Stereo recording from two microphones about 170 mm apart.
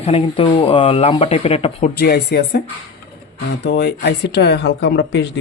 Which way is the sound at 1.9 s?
65° left (ahead or behind).